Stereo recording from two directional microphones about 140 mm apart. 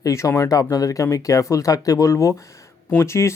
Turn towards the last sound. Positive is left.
turn(degrees=20)  # may be behind; listen again after turning